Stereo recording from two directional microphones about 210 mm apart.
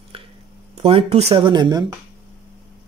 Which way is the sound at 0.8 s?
25° right (ahead or behind).